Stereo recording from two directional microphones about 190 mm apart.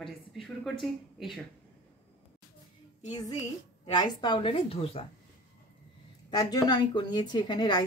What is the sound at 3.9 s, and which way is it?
A woman's voice, 20° left (ahead or behind).